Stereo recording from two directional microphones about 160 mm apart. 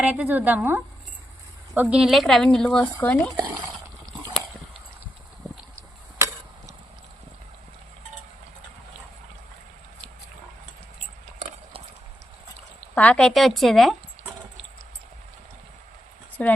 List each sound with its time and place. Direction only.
0.0 s speech: 10° right (ahead or behind); by 3.2 s 10° left (ahead or behind)
3.3 s a sound: 20° right (ahead or behind)
12.9 s speech: 10° left (ahead or behind)
16.4 s speech: 10° left (ahead or behind)